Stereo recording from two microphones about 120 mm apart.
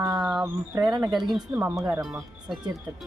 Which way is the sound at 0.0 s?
35° right (ahead or behind).